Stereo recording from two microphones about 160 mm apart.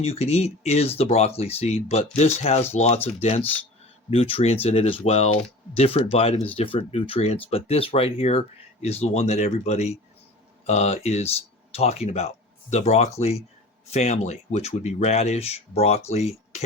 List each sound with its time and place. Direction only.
0.0 s speech: 40° left (ahead or behind)